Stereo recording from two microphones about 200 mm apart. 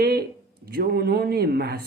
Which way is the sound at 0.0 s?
50° right (ahead or behind).